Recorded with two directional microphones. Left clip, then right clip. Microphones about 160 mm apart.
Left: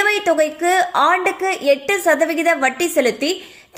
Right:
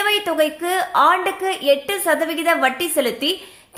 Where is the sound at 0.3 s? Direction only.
20° left (ahead or behind).